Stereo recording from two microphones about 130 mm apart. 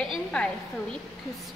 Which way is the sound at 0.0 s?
5° left (ahead or behind).